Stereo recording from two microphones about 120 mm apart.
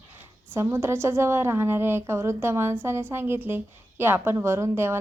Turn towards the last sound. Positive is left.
turn(degrees=-20)  # may be behind; listen again after turning